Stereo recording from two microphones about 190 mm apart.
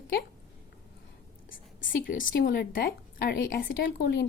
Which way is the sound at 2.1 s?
45° left (ahead or behind).